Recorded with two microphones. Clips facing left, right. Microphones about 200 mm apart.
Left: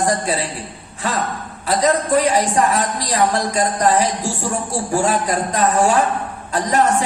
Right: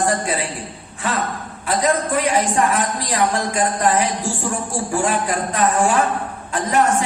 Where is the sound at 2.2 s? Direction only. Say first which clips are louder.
Left 2 dB; 40° left (ahead or behind).